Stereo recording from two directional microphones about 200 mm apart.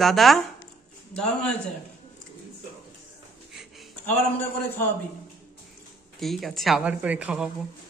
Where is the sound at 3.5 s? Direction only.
Centre (ahead or behind).